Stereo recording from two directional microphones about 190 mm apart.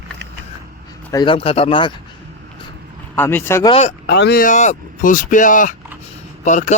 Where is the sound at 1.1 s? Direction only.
25° left (ahead or behind).